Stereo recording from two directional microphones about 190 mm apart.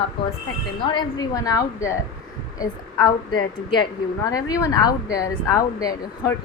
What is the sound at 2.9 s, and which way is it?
A woman's voice, 20° left (ahead or behind).